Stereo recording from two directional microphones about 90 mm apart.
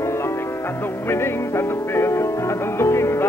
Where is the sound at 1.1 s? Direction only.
25° left (ahead or behind).